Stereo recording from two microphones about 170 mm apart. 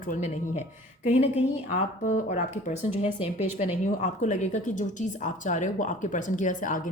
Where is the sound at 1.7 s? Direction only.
50° left (ahead or behind).